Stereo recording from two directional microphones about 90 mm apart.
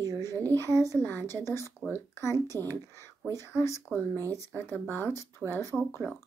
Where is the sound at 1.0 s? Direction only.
20° left (ahead or behind).